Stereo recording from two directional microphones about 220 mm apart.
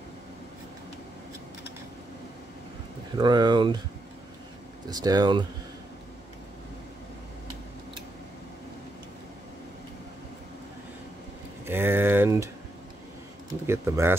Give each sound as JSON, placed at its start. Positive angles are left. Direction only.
{"t": 3.2, "sound": "speech", "side_deg": -20}
{"t": 4.8, "sound": "speech", "side_deg": -20}
{"t": 11.6, "sound": "a sound", "side_deg": -10}
{"t": 13.5, "sound": "speech", "side_deg": -10}